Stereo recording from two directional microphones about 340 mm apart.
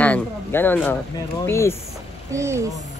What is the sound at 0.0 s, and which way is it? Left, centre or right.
Speech, centre.